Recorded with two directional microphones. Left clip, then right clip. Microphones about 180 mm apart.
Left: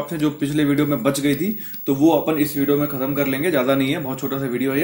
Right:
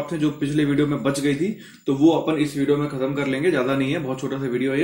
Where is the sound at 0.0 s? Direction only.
35° left (ahead or behind).